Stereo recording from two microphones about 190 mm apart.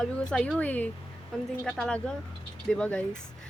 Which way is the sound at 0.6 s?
5° left (ahead or behind).